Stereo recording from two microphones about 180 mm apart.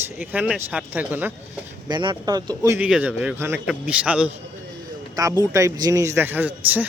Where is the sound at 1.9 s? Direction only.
25° right (ahead or behind).